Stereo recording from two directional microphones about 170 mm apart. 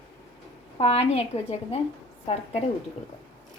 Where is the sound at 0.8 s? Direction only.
35° left (ahead or behind).